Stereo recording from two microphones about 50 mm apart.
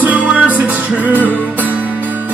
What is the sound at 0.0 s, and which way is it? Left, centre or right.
Music, right.